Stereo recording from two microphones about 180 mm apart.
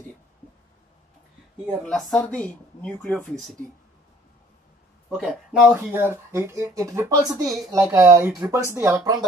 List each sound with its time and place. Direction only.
1.7 s speech: centre (ahead or behind)
5.1 s speech: centre (ahead or behind); by 9.2 s 15° right (ahead or behind)